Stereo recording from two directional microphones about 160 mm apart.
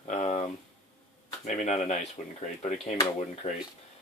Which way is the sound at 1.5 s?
45° left (ahead or behind).